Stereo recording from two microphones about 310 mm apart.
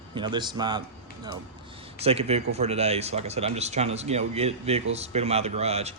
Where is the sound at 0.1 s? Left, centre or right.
Centre.